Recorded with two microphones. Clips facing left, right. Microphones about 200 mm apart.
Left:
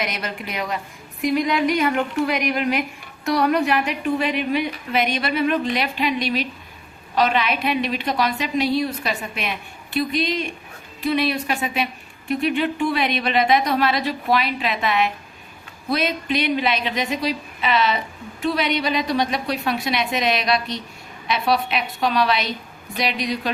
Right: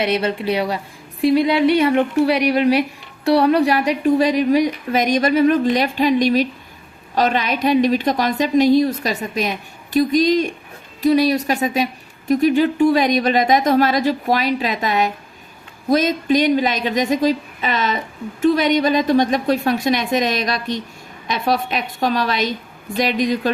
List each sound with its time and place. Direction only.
0.0 s a woman's voice: 30° right (ahead or behind); by 23.5 s 45° right (ahead or behind)